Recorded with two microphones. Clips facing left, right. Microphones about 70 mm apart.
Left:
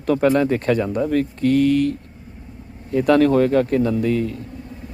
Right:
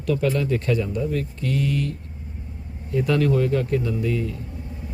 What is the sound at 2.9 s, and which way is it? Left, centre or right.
Speech, left.